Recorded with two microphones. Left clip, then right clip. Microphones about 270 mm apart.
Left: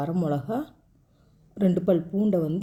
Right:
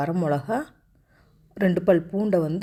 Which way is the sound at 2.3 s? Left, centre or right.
Right.